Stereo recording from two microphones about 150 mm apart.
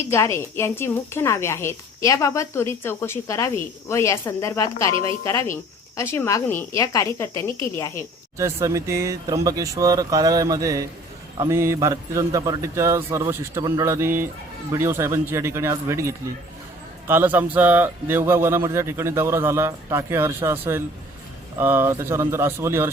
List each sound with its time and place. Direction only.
0.1 s a woman's voice: 20° left (ahead or behind)
8.4 s a man's voice: 20° right (ahead or behind)